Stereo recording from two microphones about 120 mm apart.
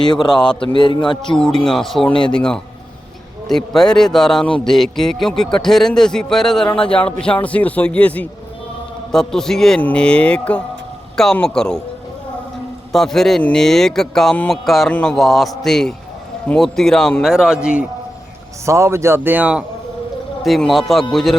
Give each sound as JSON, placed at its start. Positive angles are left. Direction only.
{"t": 0.0, "sound": "a man's voice", "side_deg": 35}
{"t": 1.4, "sound": "a man's voice", "side_deg": 5}
{"t": 12.9, "sound": "a man's voice", "side_deg": 5}
{"t": 18.6, "sound": "speech", "side_deg": -25}
{"t": 20.4, "sound": "a man's voice", "side_deg": 0}